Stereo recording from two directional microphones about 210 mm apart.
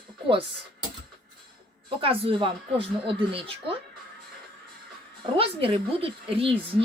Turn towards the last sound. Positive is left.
turn(degrees=-25)  # may be behind; listen again after turning